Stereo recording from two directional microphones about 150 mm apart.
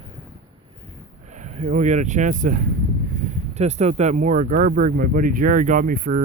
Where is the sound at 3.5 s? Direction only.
45° right (ahead or behind).